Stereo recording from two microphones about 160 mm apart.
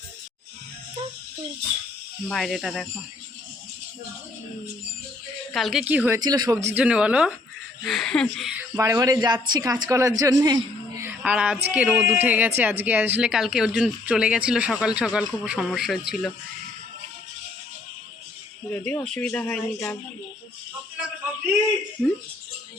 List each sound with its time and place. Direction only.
2.2 s speech: centre (ahead or behind)
5.5 s speech: centre (ahead or behind)
6.1 s speech: 25° right (ahead or behind)
6.7 s speech: 10° right (ahead or behind)
8.7 s speech: 20° right (ahead or behind)
11.2 s speech: 5° right (ahead or behind)
18.7 s speech: 10° left (ahead or behind)